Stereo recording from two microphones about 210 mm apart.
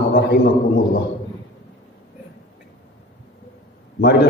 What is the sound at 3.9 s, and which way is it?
Speech, 50° left (ahead or behind).